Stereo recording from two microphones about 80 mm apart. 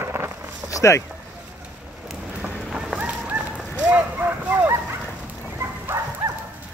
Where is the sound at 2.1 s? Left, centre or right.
Centre.